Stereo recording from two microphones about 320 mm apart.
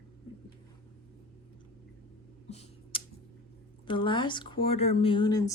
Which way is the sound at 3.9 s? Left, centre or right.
Centre.